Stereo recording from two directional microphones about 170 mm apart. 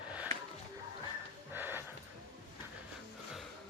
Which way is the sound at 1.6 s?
10° right (ahead or behind).